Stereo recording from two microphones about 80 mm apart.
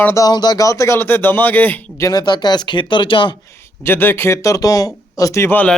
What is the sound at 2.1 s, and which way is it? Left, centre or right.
Speech, left.